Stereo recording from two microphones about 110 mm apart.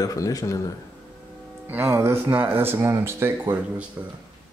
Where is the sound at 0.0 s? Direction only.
30° left (ahead or behind).